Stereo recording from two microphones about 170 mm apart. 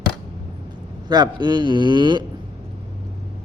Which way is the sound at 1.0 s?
25° right (ahead or behind).